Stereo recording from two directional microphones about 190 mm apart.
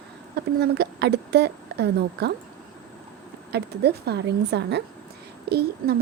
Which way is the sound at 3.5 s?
60° right (ahead or behind).